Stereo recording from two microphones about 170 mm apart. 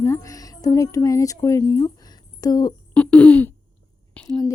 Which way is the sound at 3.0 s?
10° left (ahead or behind).